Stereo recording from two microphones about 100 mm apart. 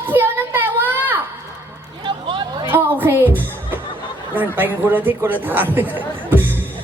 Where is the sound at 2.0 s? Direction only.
55° right (ahead or behind).